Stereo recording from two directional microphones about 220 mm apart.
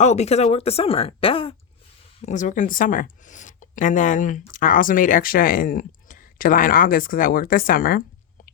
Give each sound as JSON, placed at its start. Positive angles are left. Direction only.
{"t": 0.0, "sound": "speech", "side_deg": 30}